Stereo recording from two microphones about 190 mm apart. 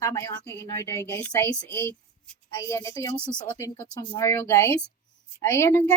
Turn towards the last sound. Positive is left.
turn(degrees=15)  # may be behind; listen again after turning